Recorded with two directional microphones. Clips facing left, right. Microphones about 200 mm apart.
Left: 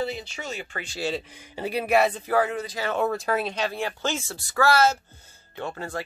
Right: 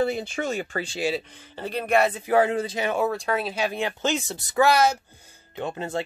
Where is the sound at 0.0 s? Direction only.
50° right (ahead or behind).